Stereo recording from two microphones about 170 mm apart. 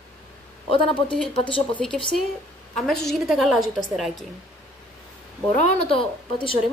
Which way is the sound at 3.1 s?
Centre (ahead or behind).